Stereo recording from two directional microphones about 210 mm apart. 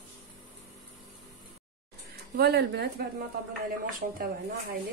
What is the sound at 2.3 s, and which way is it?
Speech, 50° right (ahead or behind).